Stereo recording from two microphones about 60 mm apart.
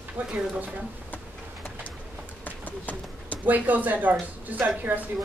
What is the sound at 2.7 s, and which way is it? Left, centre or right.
Run, left.